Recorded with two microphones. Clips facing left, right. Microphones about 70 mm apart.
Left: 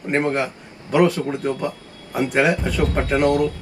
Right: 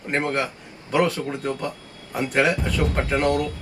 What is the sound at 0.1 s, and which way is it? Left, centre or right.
Speech, left.